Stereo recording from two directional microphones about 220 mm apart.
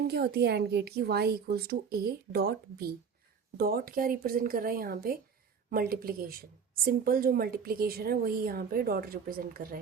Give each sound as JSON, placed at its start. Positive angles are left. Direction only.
{"t": 0.1, "sound": "a woman's voice", "side_deg": -45}